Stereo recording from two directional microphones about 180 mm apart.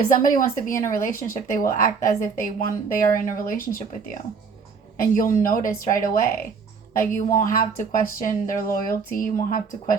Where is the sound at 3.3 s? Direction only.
50° left (ahead or behind).